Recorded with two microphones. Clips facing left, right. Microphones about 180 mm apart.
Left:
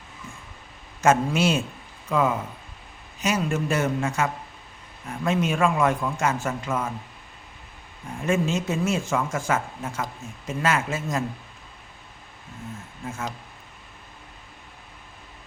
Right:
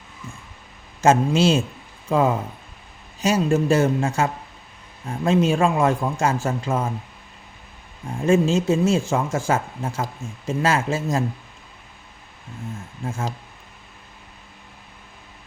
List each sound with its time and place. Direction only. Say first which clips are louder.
1.0 s speech: right 3 dB; 25° right (ahead or behind)
8.2 s speech: right 6 dB; 30° right (ahead or behind)
13.1 s speech: right 4 dB; 30° right (ahead or behind)